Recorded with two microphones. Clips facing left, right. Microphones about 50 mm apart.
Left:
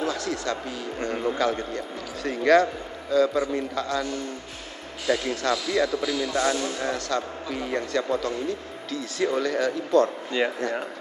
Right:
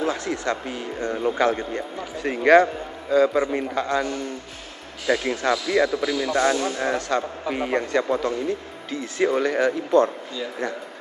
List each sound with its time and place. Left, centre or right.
0.0 s speech: right
10.4 s speech: left